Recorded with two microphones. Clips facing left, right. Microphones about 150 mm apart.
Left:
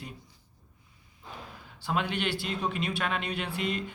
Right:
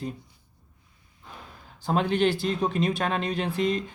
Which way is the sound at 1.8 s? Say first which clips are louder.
Right 7 dB; 40° right (ahead or behind).